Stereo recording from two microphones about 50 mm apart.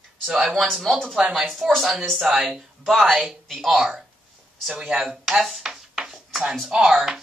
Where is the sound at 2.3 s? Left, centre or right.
Centre.